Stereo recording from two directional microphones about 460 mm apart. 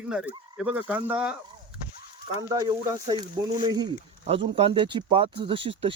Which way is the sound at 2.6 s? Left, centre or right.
Centre.